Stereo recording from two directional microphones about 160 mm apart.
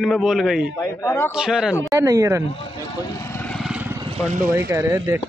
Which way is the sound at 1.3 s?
5° right (ahead or behind).